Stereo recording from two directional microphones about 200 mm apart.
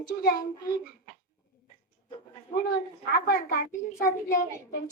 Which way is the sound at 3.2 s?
50° left (ahead or behind).